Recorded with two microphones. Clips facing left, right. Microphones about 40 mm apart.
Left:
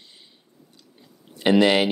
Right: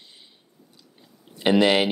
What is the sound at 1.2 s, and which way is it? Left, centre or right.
Speech, centre.